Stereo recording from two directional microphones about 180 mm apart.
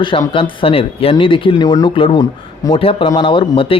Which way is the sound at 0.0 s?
30° left (ahead or behind).